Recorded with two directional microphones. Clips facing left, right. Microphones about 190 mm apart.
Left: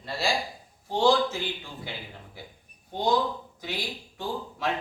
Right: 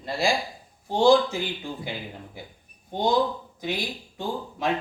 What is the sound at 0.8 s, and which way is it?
Speech, 15° right (ahead or behind).